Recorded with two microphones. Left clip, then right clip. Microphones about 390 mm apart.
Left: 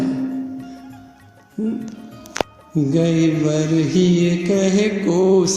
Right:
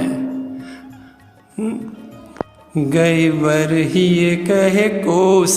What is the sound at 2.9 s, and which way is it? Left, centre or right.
Speech, right.